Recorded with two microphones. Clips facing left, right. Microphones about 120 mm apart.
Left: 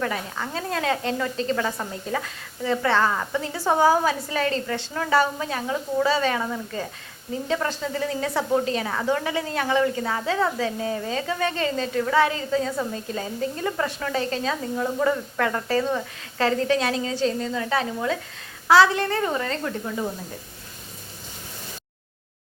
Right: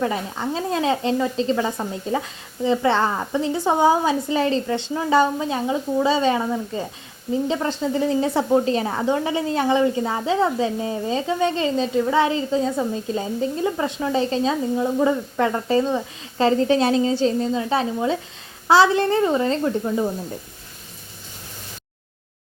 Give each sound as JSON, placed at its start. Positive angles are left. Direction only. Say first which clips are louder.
{"t": 0.0, "sound": "a woman's voice", "louder": "right 4 dB", "side_deg": -25}